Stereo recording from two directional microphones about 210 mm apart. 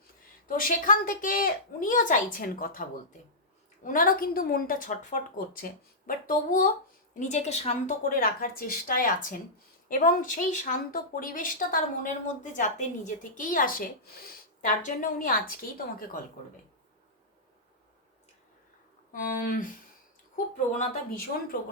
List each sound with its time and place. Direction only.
0.4 s a woman's voice: 40° left (ahead or behind)
19.1 s a woman's voice: 40° left (ahead or behind)